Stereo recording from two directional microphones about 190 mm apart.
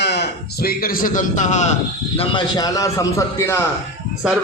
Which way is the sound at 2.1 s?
25° left (ahead or behind).